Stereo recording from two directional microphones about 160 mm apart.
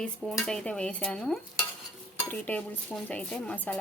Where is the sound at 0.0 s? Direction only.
5° left (ahead or behind).